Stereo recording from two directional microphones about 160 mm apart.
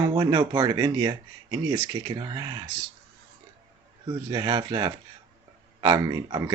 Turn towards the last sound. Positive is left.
turn(degrees=-25)  # may be behind; listen again after turning